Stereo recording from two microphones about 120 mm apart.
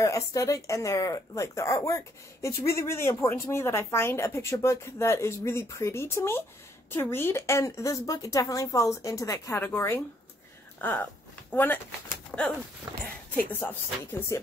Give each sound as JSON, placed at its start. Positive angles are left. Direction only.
{"t": 0.0, "sound": "speech", "side_deg": 30}
{"t": 10.8, "sound": "a sound", "side_deg": 15}
{"t": 11.5, "sound": "speech", "side_deg": 15}
{"t": 12.3, "sound": "bird", "side_deg": 10}
{"t": 12.9, "sound": "speech", "side_deg": -30}
{"t": 13.5, "sound": "speech", "side_deg": 15}